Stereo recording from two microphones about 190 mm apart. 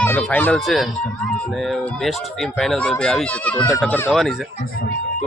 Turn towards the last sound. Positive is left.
turn(degrees=10)  # may be behind; listen again after turning